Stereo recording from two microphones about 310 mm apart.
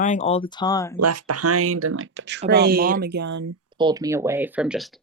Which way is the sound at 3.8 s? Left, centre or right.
Centre.